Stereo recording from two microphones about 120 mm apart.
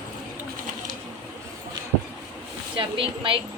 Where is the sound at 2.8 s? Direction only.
45° right (ahead or behind).